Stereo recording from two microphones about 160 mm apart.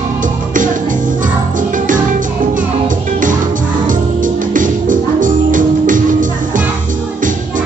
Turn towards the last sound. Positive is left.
turn(degrees=-55)  # may be behind; listen again after turning